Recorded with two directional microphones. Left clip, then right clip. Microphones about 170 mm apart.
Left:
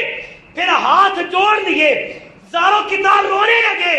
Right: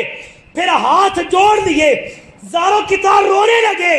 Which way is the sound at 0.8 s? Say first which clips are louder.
Even; 35° right (ahead or behind).